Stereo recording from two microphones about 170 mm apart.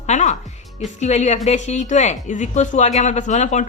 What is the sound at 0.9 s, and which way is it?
Speech, 45° left (ahead or behind).